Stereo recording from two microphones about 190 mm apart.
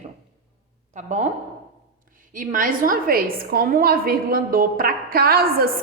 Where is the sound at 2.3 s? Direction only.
45° right (ahead or behind).